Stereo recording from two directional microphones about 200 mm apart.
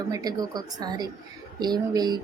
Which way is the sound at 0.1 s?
20° right (ahead or behind).